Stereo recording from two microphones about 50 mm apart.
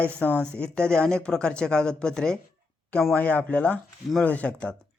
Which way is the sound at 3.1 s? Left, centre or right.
Left.